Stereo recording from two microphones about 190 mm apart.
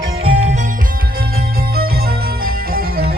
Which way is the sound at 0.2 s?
30° right (ahead or behind).